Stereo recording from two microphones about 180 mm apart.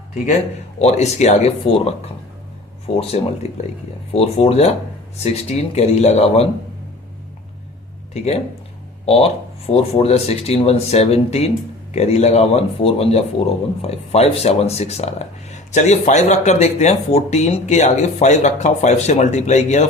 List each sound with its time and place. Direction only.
0.8 s speech: 40° left (ahead or behind)
8.1 s speech: 35° left (ahead or behind)